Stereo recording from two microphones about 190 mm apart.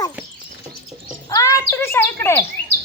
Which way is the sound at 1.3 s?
15° left (ahead or behind).